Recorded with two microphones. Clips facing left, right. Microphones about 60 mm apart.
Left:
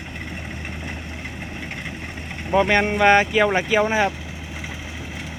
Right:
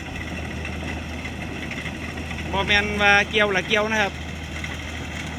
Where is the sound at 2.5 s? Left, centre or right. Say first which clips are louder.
Left 4 dB; left.